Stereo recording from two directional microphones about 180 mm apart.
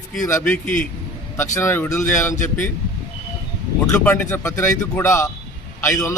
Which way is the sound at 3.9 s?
10° left (ahead or behind).